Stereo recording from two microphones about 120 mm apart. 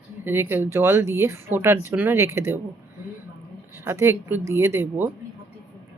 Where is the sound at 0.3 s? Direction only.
20° right (ahead or behind).